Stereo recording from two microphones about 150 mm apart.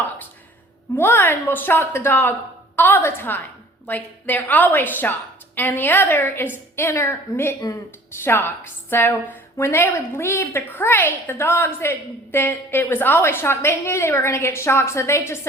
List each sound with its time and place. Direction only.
0.9 s a woman's voice: 15° left (ahead or behind)